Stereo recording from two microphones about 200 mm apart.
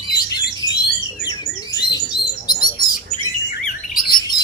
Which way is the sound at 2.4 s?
20° left (ahead or behind).